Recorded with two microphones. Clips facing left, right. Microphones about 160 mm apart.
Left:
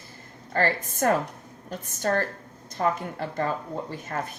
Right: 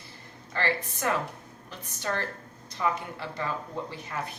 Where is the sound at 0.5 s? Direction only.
45° left (ahead or behind).